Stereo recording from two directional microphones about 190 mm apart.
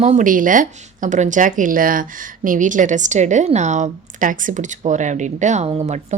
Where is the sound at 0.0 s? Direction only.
40° right (ahead or behind).